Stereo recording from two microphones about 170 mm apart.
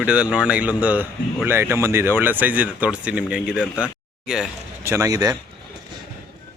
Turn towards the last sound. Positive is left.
turn(degrees=-20)  # may be behind; listen again after turning